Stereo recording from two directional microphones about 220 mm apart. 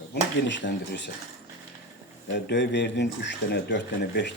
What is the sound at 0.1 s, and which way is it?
Speech, 55° left (ahead or behind).